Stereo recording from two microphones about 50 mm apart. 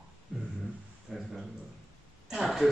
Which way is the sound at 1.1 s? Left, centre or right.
Centre.